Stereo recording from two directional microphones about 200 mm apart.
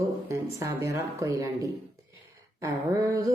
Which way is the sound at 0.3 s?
15° right (ahead or behind).